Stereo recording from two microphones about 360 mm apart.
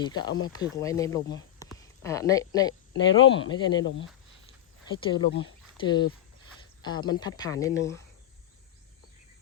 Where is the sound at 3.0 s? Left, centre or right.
Left.